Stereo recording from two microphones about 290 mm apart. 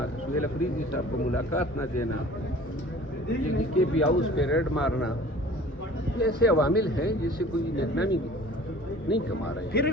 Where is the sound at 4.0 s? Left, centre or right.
Left.